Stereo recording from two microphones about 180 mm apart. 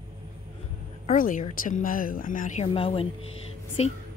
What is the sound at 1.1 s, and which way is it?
Speech, 45° left (ahead or behind).